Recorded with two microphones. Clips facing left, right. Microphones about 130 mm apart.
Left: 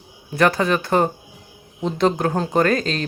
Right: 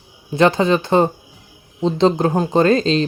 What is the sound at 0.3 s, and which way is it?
Speech, 20° right (ahead or behind).